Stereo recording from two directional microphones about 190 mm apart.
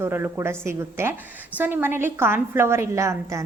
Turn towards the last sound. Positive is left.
turn(degrees=-15)  # may be behind; listen again after turning